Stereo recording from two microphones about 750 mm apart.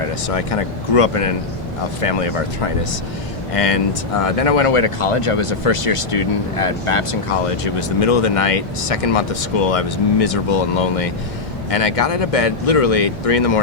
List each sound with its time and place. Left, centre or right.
0.3 s speech: left
3.5 s speech: left